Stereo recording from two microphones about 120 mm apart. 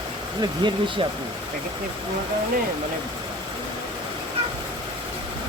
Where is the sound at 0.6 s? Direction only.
45° right (ahead or behind).